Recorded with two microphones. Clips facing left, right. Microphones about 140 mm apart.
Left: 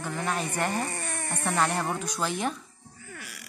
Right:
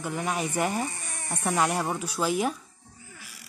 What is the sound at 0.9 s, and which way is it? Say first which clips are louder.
Speech: left 6 dB; 60° left (ahead or behind).